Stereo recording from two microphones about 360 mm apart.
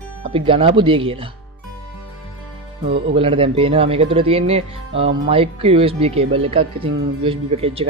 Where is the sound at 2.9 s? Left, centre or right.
Centre.